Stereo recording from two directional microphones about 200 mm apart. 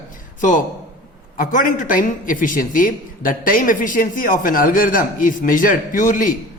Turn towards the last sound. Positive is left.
turn(degrees=40)  # may be behind; listen again after turning